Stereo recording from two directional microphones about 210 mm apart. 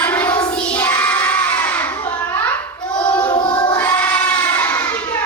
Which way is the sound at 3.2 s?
25° left (ahead or behind).